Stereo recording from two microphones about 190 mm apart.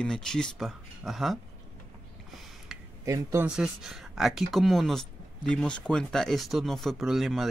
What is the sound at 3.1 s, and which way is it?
Speech, 15° right (ahead or behind).